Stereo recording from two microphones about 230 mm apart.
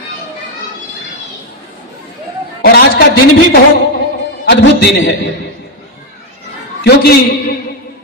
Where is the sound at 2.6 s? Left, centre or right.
Left.